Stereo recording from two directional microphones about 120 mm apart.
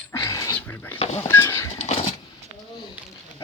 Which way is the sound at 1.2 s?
20° left (ahead or behind).